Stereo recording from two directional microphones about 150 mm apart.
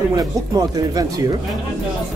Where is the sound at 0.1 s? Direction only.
25° right (ahead or behind).